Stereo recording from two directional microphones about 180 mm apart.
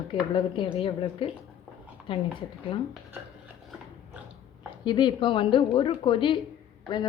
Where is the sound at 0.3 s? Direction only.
30° left (ahead or behind).